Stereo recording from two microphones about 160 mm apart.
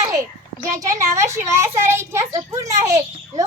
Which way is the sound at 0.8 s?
20° right (ahead or behind).